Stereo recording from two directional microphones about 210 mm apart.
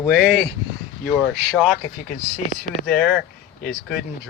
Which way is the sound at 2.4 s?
35° left (ahead or behind).